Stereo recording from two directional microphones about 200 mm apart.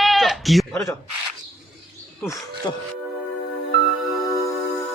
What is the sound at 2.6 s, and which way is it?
Speech, 20° left (ahead or behind).